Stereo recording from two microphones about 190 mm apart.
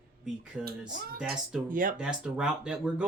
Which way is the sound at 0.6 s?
45° right (ahead or behind).